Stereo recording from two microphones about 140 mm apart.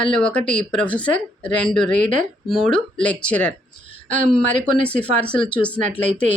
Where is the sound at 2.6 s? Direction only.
10° left (ahead or behind).